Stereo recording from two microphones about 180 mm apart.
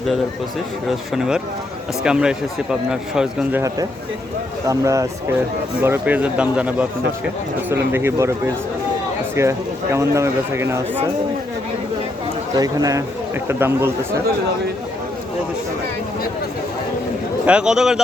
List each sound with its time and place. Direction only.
0.9 s speech: 5° right (ahead or behind)
4.6 s speech: 15° right (ahead or behind)
12.5 s a man's voice: 20° right (ahead or behind)
17.4 s speech: 5° right (ahead or behind)